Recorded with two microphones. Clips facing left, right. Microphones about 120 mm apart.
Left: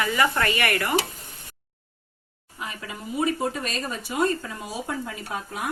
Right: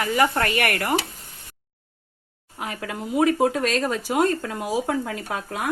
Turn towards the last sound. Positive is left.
turn(degrees=-90)